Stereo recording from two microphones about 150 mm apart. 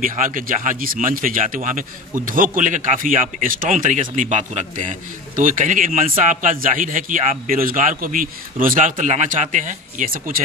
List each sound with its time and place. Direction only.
0.0 s a man's voice: 65° right (ahead or behind)